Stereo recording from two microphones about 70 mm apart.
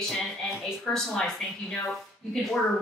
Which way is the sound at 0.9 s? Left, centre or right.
Centre.